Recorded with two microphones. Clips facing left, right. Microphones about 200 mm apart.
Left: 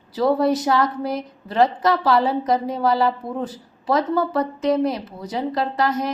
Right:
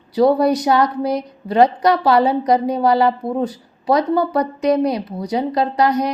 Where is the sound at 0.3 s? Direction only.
15° right (ahead or behind).